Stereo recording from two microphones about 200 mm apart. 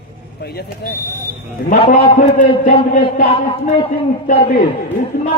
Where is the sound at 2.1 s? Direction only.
45° left (ahead or behind).